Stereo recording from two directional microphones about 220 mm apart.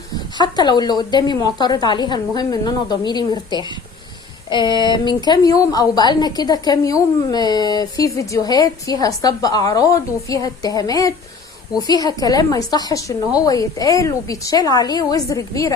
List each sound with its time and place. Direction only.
0.3 s a woman's voice: 20° left (ahead or behind)